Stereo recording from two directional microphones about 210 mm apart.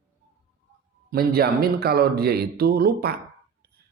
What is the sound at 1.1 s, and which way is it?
Speech, 45° right (ahead or behind).